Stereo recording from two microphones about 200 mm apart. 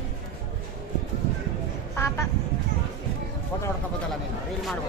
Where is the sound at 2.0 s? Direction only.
15° left (ahead or behind).